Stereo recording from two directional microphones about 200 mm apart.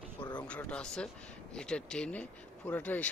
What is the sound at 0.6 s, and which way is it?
Speech, 5° left (ahead or behind).